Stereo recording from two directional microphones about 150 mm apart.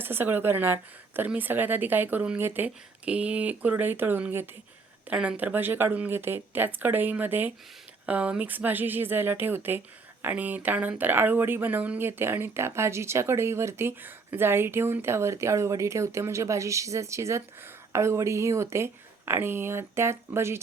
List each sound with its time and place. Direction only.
0.0 s speech: 15° right (ahead or behind)